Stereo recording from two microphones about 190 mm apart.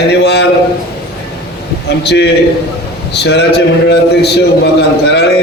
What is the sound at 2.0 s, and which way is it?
A man's voice, 60° left (ahead or behind).